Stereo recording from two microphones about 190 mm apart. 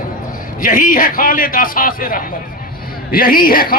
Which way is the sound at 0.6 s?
45° left (ahead or behind).